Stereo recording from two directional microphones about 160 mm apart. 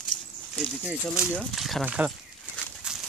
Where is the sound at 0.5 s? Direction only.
5° right (ahead or behind).